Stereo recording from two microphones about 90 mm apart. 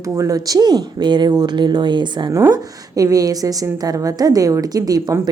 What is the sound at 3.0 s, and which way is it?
A woman's voice, 40° right (ahead or behind).